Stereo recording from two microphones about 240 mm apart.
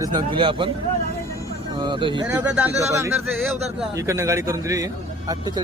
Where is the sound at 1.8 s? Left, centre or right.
Centre.